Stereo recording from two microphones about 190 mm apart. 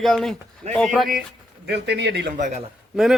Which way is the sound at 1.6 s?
60° right (ahead or behind).